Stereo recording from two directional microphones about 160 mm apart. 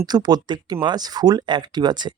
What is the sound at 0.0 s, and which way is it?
Speech, 25° right (ahead or behind).